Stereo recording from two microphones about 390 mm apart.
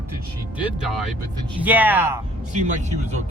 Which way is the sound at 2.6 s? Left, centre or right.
Centre.